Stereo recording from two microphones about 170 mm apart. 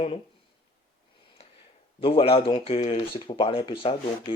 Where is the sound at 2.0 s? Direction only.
35° left (ahead or behind).